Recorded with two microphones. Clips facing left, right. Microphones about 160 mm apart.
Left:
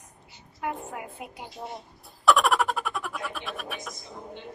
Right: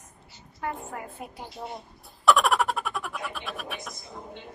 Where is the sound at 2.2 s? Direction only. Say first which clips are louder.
Even; centre (ahead or behind).